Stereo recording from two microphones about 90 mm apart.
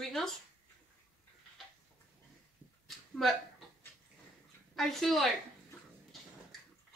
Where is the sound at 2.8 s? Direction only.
Centre (ahead or behind).